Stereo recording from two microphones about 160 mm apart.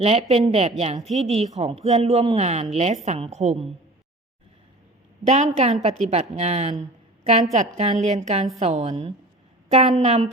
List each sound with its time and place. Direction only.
0.0 s a woman's voice: 40° right (ahead or behind)
5.3 s a woman's voice: 45° right (ahead or behind)